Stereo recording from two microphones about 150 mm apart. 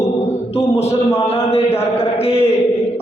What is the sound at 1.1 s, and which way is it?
Speech, 45° left (ahead or behind).